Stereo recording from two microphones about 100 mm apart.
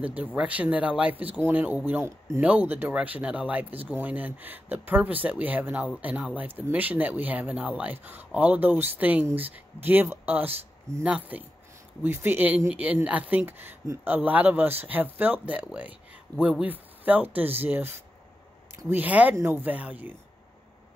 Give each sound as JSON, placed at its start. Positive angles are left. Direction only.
{"t": 0.4, "sound": "speech", "side_deg": -15}
{"t": 2.4, "sound": "speech", "side_deg": -15}